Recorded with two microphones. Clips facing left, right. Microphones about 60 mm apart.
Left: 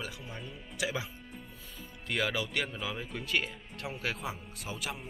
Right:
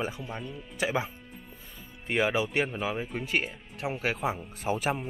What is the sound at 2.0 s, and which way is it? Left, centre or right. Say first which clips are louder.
Speech: right 6 dB; right.